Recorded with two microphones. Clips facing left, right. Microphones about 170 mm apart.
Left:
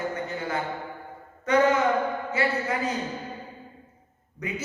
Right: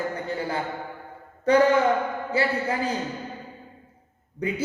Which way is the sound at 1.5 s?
30° right (ahead or behind).